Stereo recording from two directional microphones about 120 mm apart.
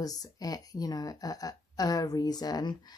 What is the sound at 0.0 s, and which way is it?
Speech, 30° left (ahead or behind).